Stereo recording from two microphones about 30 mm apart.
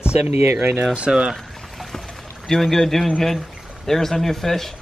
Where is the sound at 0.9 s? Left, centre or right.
Right.